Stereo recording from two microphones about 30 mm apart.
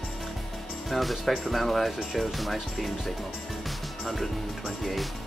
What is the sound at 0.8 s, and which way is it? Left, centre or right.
Speech, centre.